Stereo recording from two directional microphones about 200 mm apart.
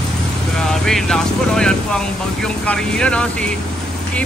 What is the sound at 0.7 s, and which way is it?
Speech, centre (ahead or behind).